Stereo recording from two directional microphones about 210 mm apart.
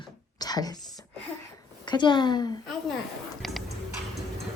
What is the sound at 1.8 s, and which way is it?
Speech, 20° left (ahead or behind).